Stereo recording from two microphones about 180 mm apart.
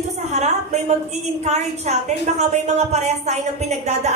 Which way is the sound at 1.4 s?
40° right (ahead or behind).